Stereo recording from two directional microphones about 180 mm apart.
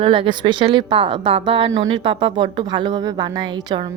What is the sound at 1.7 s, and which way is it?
Speech, 90° right.